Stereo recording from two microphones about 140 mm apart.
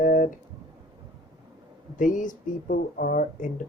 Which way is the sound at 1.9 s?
70° left (ahead or behind).